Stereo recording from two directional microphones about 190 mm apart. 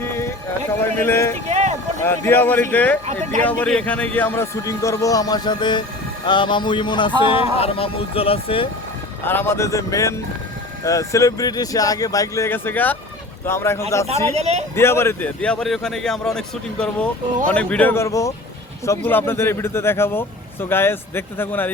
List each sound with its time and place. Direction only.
0.0 s a sound: 15° left (ahead or behind)
0.8 s speech: 10° left (ahead or behind)
1.5 s a sound: 35° right (ahead or behind)
2.0 s speech: 10° left (ahead or behind); by 8.6 s 30° left (ahead or behind)
9.2 s speech: 10° left (ahead or behind)
14.3 s speech: 35° right (ahead or behind)
14.8 s a man's voice: 15° left (ahead or behind)